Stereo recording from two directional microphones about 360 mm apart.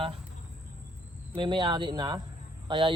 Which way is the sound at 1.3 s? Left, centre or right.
Centre.